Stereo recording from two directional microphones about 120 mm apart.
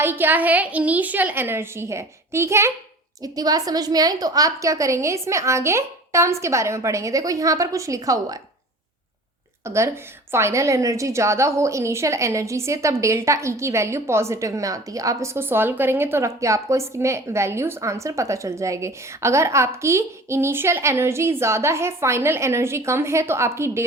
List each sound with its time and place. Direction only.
0.0 s a woman's voice: 15° right (ahead or behind)
9.6 s a woman's voice: 20° right (ahead or behind)